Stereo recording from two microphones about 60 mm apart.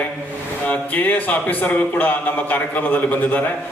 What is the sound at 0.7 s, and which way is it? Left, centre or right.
A man's voice, left.